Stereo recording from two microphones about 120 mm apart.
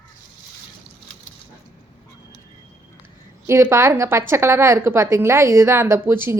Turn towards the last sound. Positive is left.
turn(degrees=-20)  # may be behind; listen again after turning